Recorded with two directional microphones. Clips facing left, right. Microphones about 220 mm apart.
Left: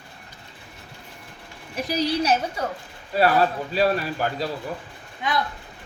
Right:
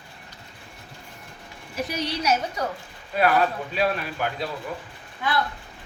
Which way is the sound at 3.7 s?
35° left (ahead or behind).